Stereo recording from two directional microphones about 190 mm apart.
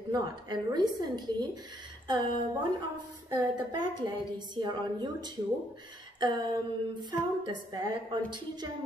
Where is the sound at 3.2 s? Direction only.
20° right (ahead or behind).